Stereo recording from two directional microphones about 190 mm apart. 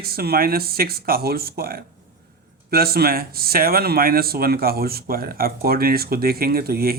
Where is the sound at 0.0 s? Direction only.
55° right (ahead or behind).